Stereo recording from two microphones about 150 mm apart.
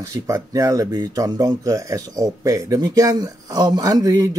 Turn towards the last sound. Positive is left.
turn(degrees=-25)  # may be behind; listen again after turning